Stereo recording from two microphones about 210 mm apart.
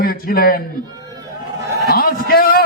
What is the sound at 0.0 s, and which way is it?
Speech, 45° left (ahead or behind).